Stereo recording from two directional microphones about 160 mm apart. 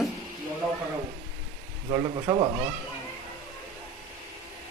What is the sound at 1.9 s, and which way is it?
Speech, 20° right (ahead or behind).